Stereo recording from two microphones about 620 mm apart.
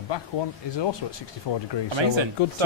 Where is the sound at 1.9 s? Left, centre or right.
Right.